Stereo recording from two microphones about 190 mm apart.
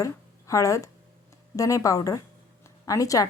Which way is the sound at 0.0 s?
15° left (ahead or behind).